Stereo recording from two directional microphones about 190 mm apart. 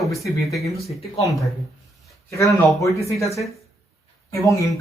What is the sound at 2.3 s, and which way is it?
Speech, 15° left (ahead or behind).